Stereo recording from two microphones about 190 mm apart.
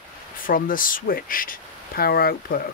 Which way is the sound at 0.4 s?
45° left (ahead or behind).